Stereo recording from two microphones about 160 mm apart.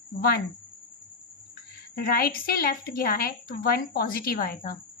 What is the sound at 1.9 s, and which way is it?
A woman's voice, 70° left (ahead or behind).